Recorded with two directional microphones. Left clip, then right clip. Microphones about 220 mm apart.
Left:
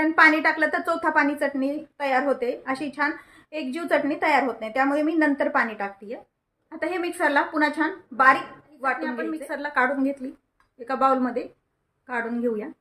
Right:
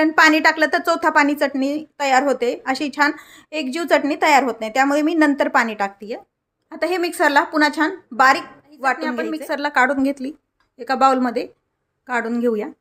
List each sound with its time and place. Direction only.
0.0 s a woman's voice: 45° right (ahead or behind)